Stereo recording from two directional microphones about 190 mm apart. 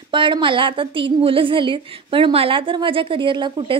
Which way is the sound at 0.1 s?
25° right (ahead or behind).